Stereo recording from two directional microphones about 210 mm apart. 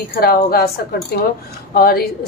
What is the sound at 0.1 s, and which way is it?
A woman's voice, 45° left (ahead or behind).